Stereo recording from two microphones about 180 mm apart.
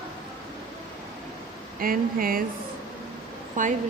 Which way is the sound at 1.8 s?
55° right (ahead or behind).